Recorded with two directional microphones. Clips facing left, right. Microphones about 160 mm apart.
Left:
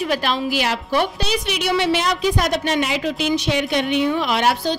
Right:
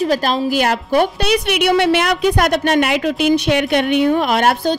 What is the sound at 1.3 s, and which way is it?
A woman's voice, 60° right (ahead or behind).